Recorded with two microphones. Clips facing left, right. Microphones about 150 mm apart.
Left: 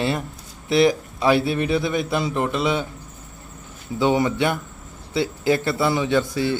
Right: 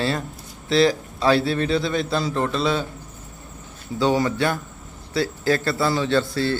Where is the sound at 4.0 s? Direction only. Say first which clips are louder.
Left 1 dB; 20° left (ahead or behind).